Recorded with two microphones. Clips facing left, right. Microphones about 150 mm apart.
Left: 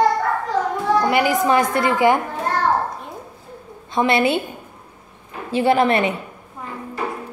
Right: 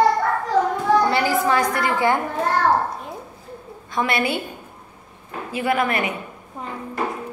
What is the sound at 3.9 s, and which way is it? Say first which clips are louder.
Speech: left 5 dB; 25° left (ahead or behind).